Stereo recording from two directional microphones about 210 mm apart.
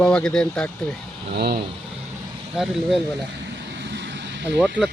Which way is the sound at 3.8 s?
55° right (ahead or behind).